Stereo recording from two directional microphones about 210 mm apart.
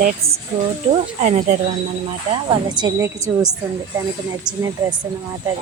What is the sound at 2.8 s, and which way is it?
Speech, 15° right (ahead or behind).